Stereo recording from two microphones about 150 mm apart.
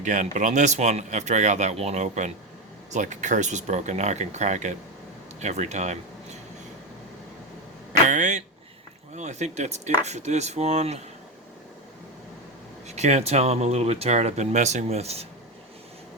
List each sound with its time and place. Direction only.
0.0 s speech: 55° right (ahead or behind)
8.0 s a sound: 55° right (ahead or behind)
9.1 s speech: 50° right (ahead or behind)
12.9 s speech: 50° right (ahead or behind)